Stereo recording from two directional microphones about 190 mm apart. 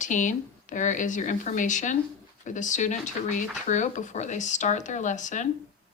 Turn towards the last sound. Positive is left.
turn(degrees=40)  # may be behind; listen again after turning